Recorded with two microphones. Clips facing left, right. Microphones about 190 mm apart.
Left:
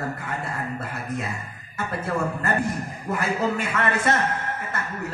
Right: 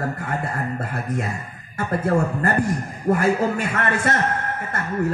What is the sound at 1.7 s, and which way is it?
A man's voice, 50° right (ahead or behind).